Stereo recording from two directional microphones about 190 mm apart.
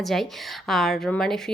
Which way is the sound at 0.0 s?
Centre (ahead or behind).